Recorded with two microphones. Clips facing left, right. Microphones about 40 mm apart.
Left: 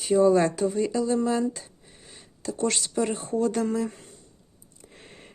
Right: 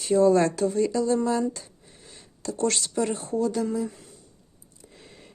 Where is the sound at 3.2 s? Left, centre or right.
Left.